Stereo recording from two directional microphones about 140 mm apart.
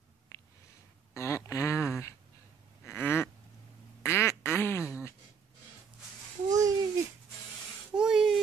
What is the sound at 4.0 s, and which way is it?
Quack, 20° left (ahead or behind).